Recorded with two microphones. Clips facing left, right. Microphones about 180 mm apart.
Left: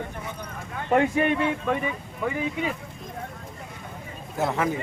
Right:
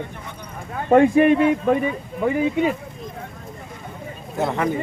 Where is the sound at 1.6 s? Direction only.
40° right (ahead or behind).